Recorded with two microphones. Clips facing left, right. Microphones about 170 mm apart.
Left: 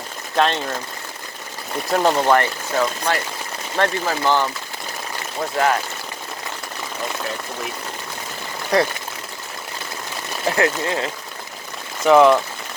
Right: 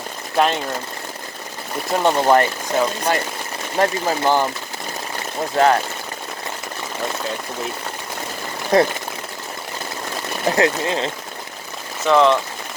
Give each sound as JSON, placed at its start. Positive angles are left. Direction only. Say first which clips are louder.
{"t": 0.3, "sound": "speech", "louder": "right 1 dB", "side_deg": -10}
{"t": 1.9, "sound": "speech", "louder": "even", "side_deg": 0}
{"t": 2.2, "sound": "speech", "louder": "right 2 dB", "side_deg": -20}
{"t": 5.5, "sound": "speech", "louder": "right 4 dB", "side_deg": -30}
{"t": 8.7, "sound": "speech", "louder": "right 3 dB", "side_deg": -20}
{"t": 10.5, "sound": "speech", "louder": "right 1 dB", "side_deg": -25}
{"t": 12.0, "sound": "speech", "louder": "left 3 dB", "side_deg": 10}